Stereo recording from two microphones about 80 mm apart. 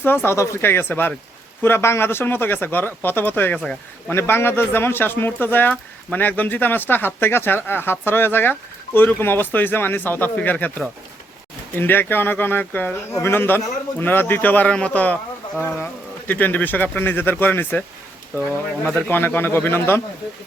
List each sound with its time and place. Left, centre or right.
0.0 s speech: left
19.0 s speech: left